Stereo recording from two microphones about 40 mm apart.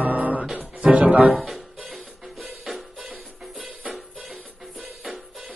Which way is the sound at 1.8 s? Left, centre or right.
Centre.